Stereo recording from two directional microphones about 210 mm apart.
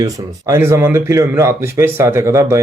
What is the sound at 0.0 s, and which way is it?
A man's voice, 15° right (ahead or behind).